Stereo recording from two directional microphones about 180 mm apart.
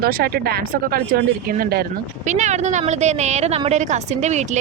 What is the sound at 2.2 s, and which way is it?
A woman's voice, 40° right (ahead or behind).